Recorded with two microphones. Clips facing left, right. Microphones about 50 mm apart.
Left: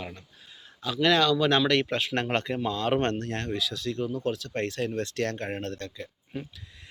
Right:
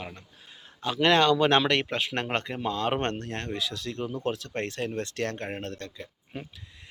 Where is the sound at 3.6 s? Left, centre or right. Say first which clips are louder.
Left 2 dB; right.